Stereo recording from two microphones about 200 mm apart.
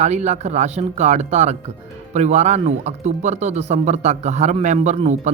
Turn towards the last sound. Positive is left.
turn(degrees=-35)  # may be behind; listen again after turning